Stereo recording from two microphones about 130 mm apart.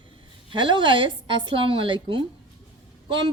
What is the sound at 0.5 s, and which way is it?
Speech, 35° right (ahead or behind).